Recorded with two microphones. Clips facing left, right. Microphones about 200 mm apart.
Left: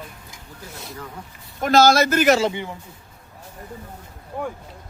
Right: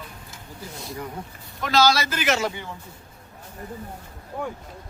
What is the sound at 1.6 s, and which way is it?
Speech, 50° left (ahead or behind).